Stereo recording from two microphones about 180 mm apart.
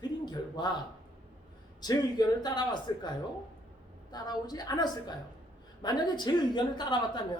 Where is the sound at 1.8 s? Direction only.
20° left (ahead or behind).